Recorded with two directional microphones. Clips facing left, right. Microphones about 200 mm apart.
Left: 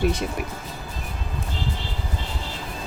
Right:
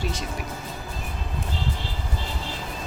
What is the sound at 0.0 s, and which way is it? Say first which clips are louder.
Speech: left 8 dB; 60° left (ahead or behind).